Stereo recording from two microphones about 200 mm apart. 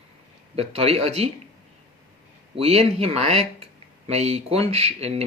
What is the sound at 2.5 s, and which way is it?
Speech, 30° right (ahead or behind).